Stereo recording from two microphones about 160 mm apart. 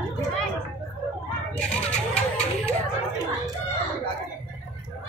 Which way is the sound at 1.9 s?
5° left (ahead or behind).